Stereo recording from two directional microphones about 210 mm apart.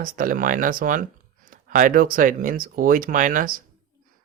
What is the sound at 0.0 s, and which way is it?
Speech, 40° right (ahead or behind).